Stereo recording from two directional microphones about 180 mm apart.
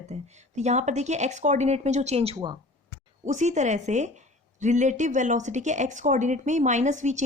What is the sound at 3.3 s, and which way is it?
A woman's voice, 40° right (ahead or behind).